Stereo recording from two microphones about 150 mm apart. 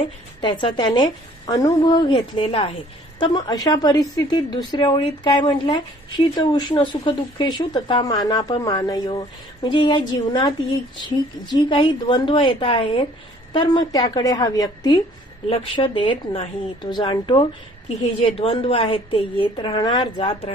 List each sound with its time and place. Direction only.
0.4 s a woman's voice: 35° left (ahead or behind)
3.2 s a woman's voice: 25° left (ahead or behind)
17.8 s a woman's voice: 40° left (ahead or behind)